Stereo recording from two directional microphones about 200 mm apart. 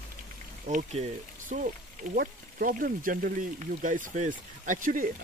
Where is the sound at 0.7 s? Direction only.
40° right (ahead or behind).